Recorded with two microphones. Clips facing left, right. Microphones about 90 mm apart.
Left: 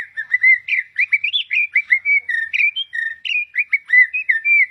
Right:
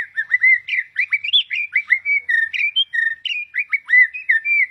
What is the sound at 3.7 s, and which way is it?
Bird, 50° right (ahead or behind).